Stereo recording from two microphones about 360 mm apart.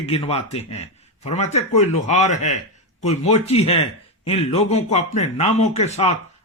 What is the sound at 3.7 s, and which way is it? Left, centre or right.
A man's voice, centre.